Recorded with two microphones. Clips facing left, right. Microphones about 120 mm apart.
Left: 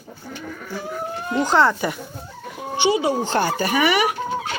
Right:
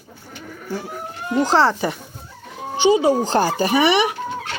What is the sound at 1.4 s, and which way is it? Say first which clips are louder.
Speech: right 1 dB; 35° right (ahead or behind).